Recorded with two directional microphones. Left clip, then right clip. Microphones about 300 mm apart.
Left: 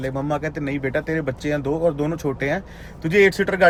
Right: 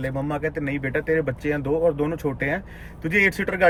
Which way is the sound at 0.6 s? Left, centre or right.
Centre.